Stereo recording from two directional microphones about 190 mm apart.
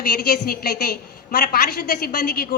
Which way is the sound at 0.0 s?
55° left (ahead or behind).